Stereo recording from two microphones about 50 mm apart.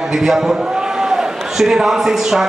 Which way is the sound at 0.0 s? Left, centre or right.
Centre.